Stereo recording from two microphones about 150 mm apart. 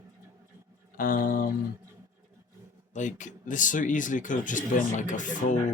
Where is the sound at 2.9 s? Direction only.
55° left (ahead or behind).